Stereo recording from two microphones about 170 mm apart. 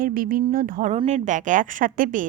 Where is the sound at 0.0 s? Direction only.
55° right (ahead or behind).